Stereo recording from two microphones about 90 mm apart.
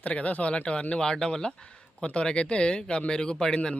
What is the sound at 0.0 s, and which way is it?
Speech, 15° left (ahead or behind).